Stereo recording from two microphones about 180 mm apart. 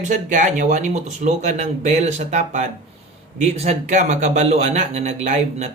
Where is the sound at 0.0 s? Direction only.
45° right (ahead or behind).